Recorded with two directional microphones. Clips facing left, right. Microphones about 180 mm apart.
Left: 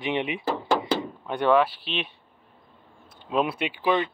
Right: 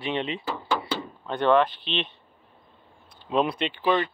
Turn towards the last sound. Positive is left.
turn(degrees=10)  # may be behind; listen again after turning